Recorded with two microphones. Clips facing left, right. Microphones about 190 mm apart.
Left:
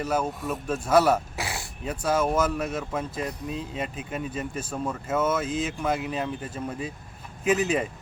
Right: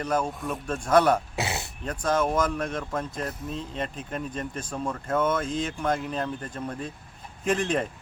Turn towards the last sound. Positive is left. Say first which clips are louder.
# left 2 dB
turn(degrees=5)  # may be behind; listen again after turning